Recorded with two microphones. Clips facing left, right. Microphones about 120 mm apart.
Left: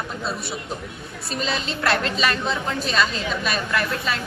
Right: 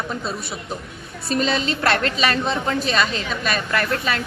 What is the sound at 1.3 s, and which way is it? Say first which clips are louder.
A woman's voice: right 6 dB; centre (ahead or behind).